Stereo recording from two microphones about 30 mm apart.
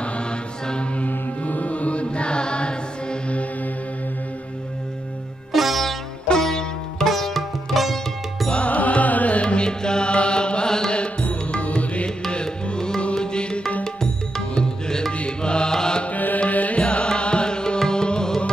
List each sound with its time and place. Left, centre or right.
1.0 s music: left
5.5 s sitar: centre
6.4 s music: centre
7.1 s sitar: centre
8.6 s music: left
9.7 s music: left
11.7 s music: left
15.7 s mantra: left
16.1 s music: left
16.4 s music: left
16.8 s music: left